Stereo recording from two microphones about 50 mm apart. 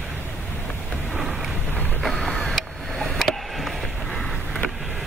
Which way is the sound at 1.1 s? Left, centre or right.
Centre.